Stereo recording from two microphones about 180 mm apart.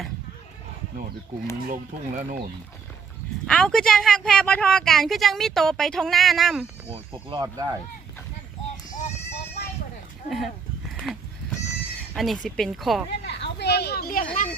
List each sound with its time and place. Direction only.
1.7 s speech: 50° right (ahead or behind)
3.4 s speech: 5° left (ahead or behind)
6.8 s speech: 30° right (ahead or behind)
10.2 s speech: centre (ahead or behind)
10.9 s goose: centre (ahead or behind)
12.1 s speech: centre (ahead or behind)
13.2 s a sound: 70° left (ahead or behind); by 14.5 s 50° left (ahead or behind)